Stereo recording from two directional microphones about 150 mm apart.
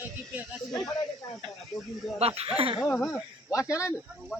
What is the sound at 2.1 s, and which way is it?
Speech, 40° right (ahead or behind).